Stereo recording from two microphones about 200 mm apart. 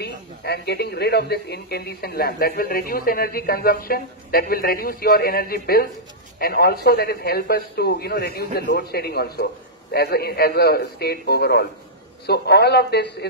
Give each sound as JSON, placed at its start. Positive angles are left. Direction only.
{"t": 0.0, "sound": "a man's voice", "side_deg": 55}